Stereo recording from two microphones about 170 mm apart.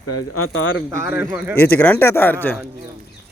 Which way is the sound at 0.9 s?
15° right (ahead or behind).